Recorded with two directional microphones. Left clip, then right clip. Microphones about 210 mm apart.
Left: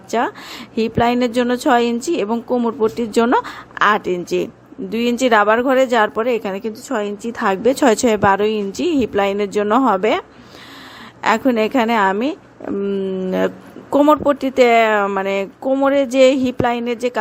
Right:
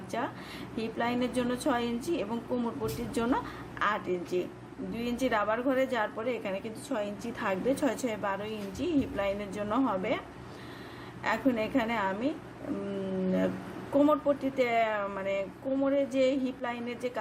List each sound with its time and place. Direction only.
0.1 s a woman's voice: 45° left (ahead or behind)
13.9 s a woman's voice: 45° left (ahead or behind)